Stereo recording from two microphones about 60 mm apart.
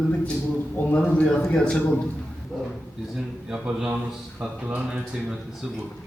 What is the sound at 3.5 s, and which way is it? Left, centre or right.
Speech, centre.